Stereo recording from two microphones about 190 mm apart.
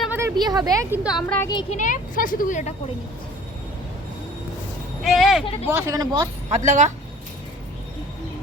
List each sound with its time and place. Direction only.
0.0 s a sound: 10° right (ahead or behind)
1.0 s speech: centre (ahead or behind)
1.4 s speech: 20° left (ahead or behind)
1.7 s speech: 45° left (ahead or behind)
5.0 s speech: centre (ahead or behind)
5.6 s speech: 15° right (ahead or behind)
6.5 s speech: 40° right (ahead or behind)